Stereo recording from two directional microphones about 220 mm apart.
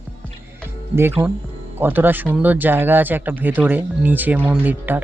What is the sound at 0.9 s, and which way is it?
Speech, 10° right (ahead or behind).